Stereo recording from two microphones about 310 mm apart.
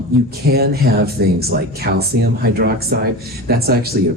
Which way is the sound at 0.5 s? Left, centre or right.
Right.